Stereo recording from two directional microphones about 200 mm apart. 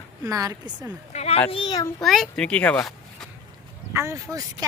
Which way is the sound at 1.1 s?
30° left (ahead or behind).